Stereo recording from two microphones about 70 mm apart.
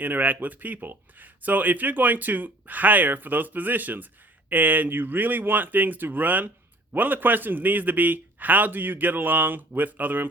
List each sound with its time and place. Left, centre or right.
0.0 s speech: right